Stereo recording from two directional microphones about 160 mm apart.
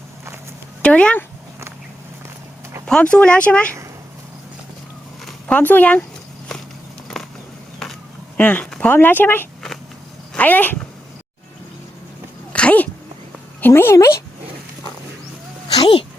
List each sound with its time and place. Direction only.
0.8 s speech: 5° left (ahead or behind)
2.8 s speech: 5° left (ahead or behind)
5.2 s speech: 10° left (ahead or behind)
8.4 s speech: 10° left (ahead or behind)
12.5 s sneeze: 10° left (ahead or behind)
13.6 s speech: 15° left (ahead or behind)
15.7 s a sound: 30° left (ahead or behind)